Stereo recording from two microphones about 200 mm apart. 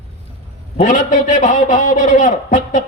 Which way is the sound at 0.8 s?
40° left (ahead or behind).